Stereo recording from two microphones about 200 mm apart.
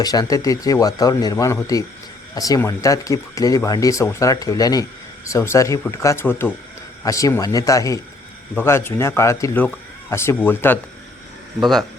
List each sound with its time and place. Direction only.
0.0 s speech: 20° left (ahead or behind)
11.6 s speech: centre (ahead or behind)